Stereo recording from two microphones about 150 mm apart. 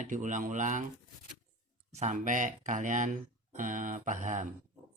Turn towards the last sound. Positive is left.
turn(degrees=-55)  # may be behind; listen again after turning